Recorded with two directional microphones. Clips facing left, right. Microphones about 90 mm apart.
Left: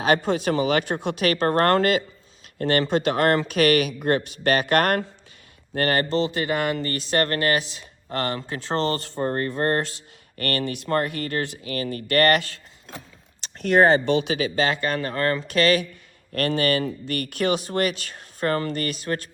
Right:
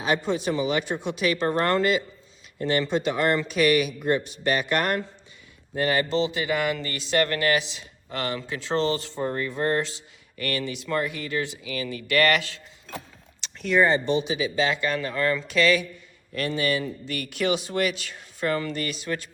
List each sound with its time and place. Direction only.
0.0 s speech: 65° left (ahead or behind); by 12.5 s 45° left (ahead or behind)
13.4 s a sound: 45° left (ahead or behind)
13.7 s speech: 70° left (ahead or behind); by 19.3 s 45° left (ahead or behind)